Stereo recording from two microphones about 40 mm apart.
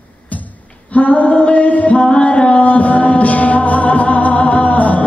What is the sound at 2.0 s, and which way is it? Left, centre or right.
Music, left.